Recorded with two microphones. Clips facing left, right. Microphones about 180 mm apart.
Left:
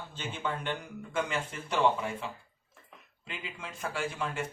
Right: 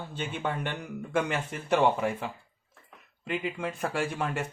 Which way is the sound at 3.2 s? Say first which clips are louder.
Right 11 dB; 55° right (ahead or behind).